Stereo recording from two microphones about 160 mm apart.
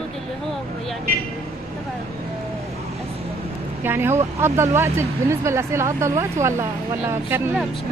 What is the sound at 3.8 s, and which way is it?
Speech, 15° right (ahead or behind).